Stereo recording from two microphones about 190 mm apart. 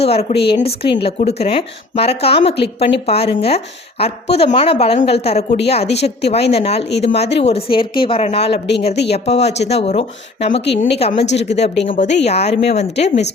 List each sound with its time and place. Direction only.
0.0 s speech: 35° left (ahead or behind)